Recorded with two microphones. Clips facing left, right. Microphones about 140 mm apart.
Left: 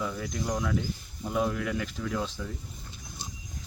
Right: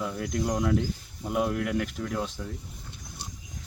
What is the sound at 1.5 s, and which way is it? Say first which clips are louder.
Speech: right 3 dB; 50° right (ahead or behind).